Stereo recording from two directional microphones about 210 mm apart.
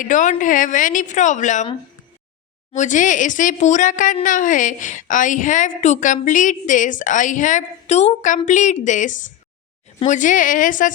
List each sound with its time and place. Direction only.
0.0 s speech: 35° left (ahead or behind)
2.7 s speech: 35° left (ahead or behind)